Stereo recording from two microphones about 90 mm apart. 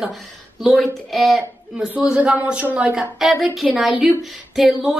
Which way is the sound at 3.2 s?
Centre (ahead or behind).